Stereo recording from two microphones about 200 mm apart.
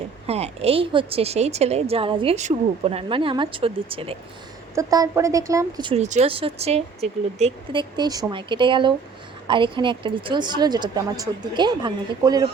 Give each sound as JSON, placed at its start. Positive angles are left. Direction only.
{"t": 0.3, "sound": "a woman's voice", "side_deg": -30}
{"t": 4.7, "sound": "a woman's voice", "side_deg": -15}
{"t": 6.0, "sound": "a woman's voice", "side_deg": -35}